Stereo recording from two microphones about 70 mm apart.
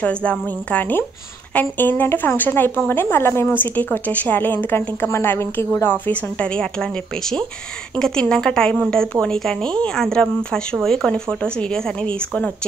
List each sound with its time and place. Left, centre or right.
0.0 s a woman's voice: centre; by 6.1 s left
6.4 s a woman's voice: centre